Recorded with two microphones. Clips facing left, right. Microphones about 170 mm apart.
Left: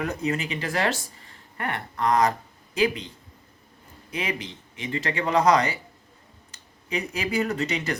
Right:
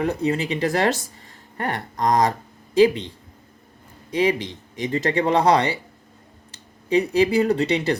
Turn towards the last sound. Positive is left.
turn(degrees=-30)  # may be behind; listen again after turning